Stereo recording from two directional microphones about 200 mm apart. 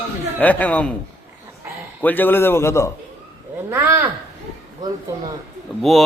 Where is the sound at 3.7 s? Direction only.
10° right (ahead or behind).